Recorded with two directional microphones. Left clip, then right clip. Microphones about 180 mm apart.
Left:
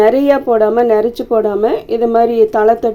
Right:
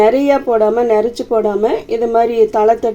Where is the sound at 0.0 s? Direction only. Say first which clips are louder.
Left 1 dB; 5° left (ahead or behind).